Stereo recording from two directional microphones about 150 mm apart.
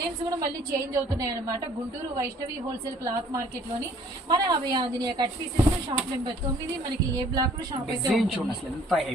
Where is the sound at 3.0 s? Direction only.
20° right (ahead or behind).